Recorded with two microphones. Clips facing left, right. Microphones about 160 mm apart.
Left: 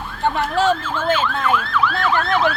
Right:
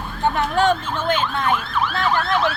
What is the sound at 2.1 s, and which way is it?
Emergency vehicle, 55° left (ahead or behind).